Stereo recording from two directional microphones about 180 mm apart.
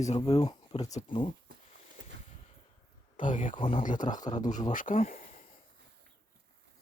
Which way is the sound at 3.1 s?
45° left (ahead or behind).